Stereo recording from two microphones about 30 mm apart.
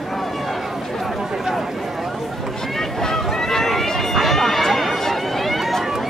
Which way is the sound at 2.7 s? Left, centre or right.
Centre.